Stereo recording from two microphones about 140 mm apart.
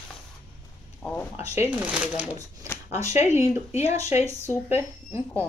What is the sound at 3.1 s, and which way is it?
Speech, 55° left (ahead or behind).